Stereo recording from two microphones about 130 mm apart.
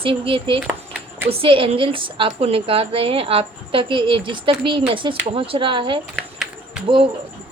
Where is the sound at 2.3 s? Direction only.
55° right (ahead or behind).